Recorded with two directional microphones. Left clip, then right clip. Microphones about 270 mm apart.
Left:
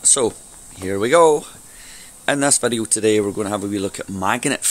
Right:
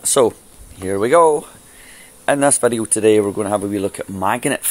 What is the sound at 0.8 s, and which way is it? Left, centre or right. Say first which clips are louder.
Speech: right 1 dB; centre.